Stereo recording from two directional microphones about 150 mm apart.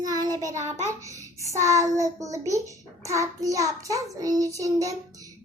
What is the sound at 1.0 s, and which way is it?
A child's voice, 20° right (ahead or behind).